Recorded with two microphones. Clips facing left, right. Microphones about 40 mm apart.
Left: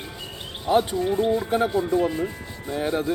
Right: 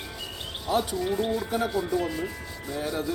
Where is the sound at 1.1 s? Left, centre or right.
Centre.